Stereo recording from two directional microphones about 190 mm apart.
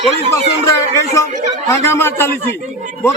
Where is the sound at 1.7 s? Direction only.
15° left (ahead or behind).